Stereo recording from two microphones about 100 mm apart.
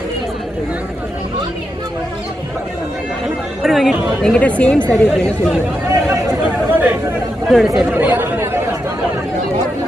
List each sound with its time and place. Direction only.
3.6 s speech: centre (ahead or behind); by 5.3 s 15° left (ahead or behind)
6.7 s chatter: 20° right (ahead or behind)
7.4 s speech: centre (ahead or behind)
7.9 s chatter: 20° right (ahead or behind)